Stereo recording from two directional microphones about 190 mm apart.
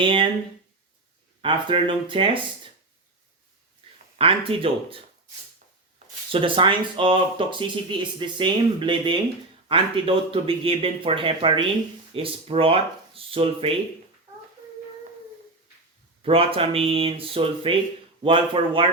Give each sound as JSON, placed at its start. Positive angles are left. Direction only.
{"t": 0.0, "sound": "speech", "side_deg": -25}
{"t": 1.4, "sound": "speech", "side_deg": -25}
{"t": 4.2, "sound": "speech", "side_deg": -30}
{"t": 6.3, "sound": "speech", "side_deg": -25}
{"t": 16.2, "sound": "speech", "side_deg": -30}